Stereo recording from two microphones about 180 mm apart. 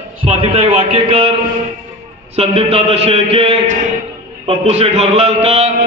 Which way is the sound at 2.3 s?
35° right (ahead or behind).